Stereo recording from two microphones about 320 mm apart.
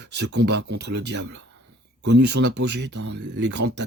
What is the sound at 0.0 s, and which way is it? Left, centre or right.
Speech, right.